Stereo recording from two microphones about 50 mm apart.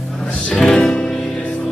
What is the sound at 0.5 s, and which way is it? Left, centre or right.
Music, centre.